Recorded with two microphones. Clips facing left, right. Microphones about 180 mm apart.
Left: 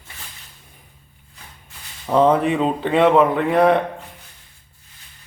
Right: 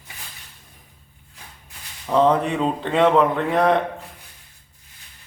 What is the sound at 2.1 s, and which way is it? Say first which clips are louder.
Speech: left 2 dB; 5° left (ahead or behind).